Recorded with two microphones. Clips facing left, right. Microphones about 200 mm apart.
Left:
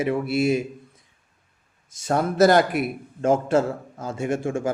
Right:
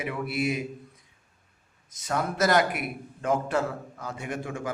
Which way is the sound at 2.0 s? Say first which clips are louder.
Left 8 dB; 35° left (ahead or behind).